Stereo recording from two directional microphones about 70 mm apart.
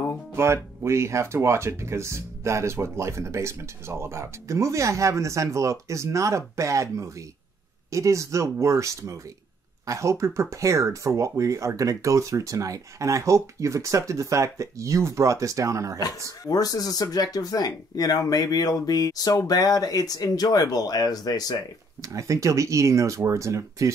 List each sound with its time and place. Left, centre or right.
0.8 s speech: right
16.3 s speech: left
22.0 s speech: right